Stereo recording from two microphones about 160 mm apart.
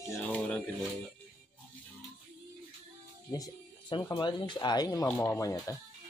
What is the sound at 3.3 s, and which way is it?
Speech, 25° left (ahead or behind).